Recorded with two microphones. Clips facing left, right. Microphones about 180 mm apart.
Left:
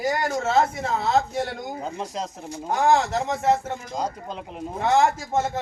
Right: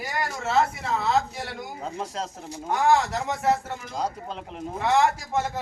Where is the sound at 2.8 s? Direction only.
25° left (ahead or behind).